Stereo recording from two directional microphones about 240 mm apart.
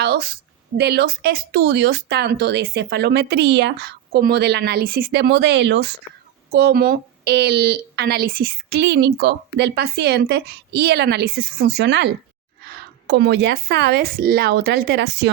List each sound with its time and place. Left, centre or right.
0.0 s a woman's voice: right